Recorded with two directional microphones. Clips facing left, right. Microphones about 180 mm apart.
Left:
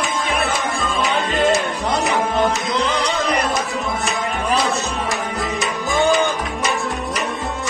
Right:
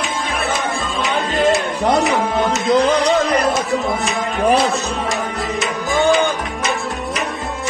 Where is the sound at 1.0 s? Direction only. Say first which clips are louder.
Right 2 dB; centre (ahead or behind).